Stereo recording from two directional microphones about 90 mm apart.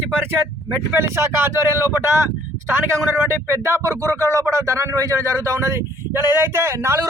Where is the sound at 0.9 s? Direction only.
30° right (ahead or behind).